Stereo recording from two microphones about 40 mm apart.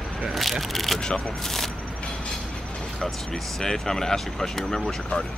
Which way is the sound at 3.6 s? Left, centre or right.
Centre.